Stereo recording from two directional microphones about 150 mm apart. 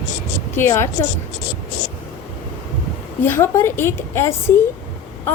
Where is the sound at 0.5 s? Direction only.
15° left (ahead or behind).